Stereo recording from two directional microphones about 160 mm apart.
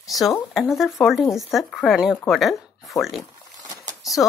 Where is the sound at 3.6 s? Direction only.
20° right (ahead or behind).